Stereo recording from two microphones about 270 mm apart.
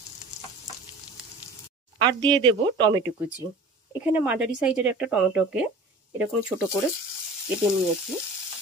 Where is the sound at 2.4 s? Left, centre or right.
Centre.